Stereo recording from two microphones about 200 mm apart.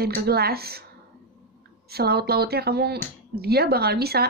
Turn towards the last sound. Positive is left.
turn(degrees=-50)  # may be behind; listen again after turning